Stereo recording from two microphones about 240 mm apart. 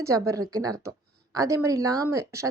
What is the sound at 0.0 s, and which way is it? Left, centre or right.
Speech, centre.